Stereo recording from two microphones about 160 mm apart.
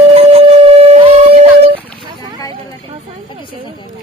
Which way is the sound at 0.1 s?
40° right (ahead or behind).